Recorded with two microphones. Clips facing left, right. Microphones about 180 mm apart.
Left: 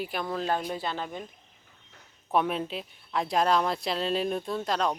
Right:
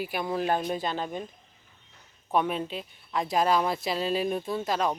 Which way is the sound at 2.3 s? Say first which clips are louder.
Even; centre (ahead or behind).